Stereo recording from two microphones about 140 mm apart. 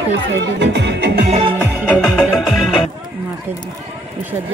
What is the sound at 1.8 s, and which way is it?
Music, centre (ahead or behind).